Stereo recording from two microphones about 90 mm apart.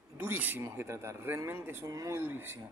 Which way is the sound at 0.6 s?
35° right (ahead or behind).